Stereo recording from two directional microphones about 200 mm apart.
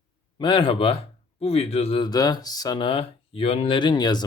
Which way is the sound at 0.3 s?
25° left (ahead or behind).